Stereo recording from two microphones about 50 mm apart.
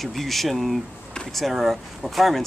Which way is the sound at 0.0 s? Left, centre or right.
Centre.